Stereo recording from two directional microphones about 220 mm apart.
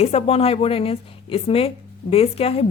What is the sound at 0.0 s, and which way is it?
Speech, 30° left (ahead or behind).